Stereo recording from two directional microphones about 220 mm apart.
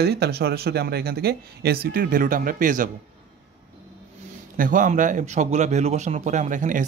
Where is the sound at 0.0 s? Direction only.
45° right (ahead or behind).